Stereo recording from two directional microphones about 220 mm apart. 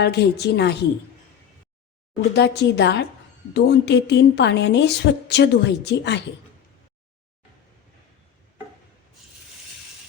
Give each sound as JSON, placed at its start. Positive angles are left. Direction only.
{"t": 0.0, "sound": "a woman's voice", "side_deg": 50}
{"t": 2.3, "sound": "a woman's voice", "side_deg": 50}